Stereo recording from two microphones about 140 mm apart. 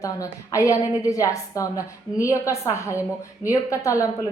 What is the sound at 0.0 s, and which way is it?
A woman's voice, 20° left (ahead or behind).